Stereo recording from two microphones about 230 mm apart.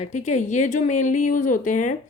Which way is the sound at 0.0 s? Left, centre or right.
Left.